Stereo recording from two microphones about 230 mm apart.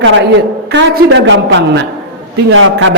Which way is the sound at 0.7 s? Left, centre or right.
Right.